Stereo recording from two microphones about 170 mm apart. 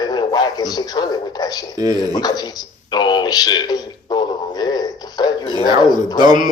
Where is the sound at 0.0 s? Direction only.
25° left (ahead or behind).